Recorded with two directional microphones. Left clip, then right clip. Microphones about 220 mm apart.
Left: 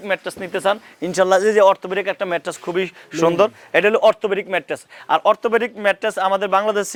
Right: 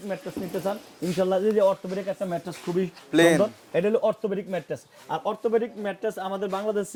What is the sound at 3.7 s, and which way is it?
Speech, 10° left (ahead or behind).